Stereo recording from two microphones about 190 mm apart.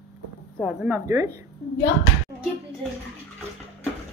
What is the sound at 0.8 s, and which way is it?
Speech, 15° right (ahead or behind).